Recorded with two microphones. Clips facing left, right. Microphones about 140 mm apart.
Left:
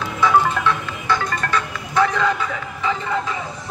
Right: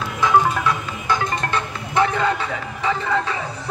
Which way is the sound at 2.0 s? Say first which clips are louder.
Left 1 dB; 30° right (ahead or behind).